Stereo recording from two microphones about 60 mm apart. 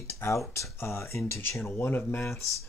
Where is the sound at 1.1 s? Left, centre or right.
Left.